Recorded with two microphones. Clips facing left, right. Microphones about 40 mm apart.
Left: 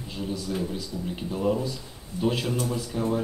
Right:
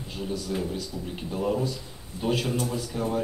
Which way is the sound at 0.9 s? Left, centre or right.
Right.